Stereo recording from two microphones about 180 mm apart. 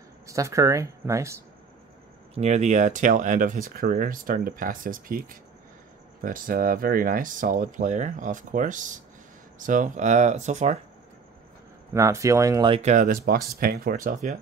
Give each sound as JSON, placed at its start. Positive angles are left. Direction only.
{"t": 0.3, "sound": "speech", "side_deg": -15}
{"t": 2.3, "sound": "speech", "side_deg": -40}
{"t": 6.2, "sound": "speech", "side_deg": -50}
{"t": 11.9, "sound": "speech", "side_deg": -15}
{"t": 12.7, "sound": "speech", "side_deg": -40}